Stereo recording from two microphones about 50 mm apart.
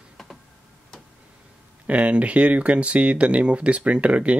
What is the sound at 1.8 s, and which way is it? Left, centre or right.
Speech, right.